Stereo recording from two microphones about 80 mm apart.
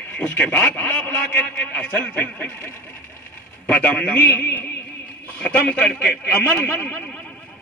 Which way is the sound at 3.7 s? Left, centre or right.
Centre.